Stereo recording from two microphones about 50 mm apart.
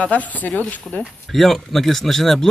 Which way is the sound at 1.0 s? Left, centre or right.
Centre.